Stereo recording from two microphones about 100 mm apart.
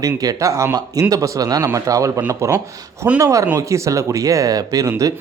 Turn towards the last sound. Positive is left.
turn(degrees=-35)  # may be behind; listen again after turning